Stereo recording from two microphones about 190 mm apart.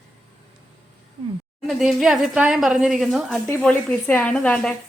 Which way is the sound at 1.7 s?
Centre (ahead or behind).